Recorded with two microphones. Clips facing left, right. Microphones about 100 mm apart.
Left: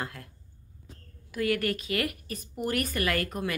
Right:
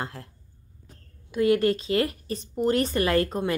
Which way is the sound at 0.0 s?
30° right (ahead or behind).